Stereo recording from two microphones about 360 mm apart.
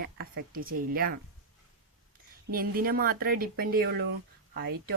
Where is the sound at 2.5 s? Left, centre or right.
Right.